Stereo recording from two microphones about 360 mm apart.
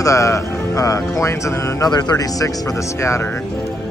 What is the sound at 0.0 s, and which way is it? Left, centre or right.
Speech, centre.